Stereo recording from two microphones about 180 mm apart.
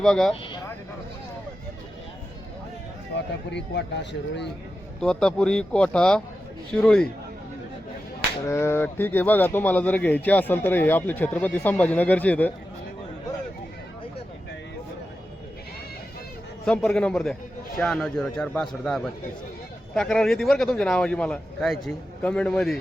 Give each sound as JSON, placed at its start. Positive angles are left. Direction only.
{"t": 0.0, "sound": "a man's voice", "side_deg": 0}
{"t": 3.5, "sound": "speech", "side_deg": 75}
{"t": 4.9, "sound": "a man's voice", "side_deg": 5}
{"t": 8.4, "sound": "speech", "side_deg": 15}
{"t": 16.6, "sound": "a man's voice", "side_deg": 5}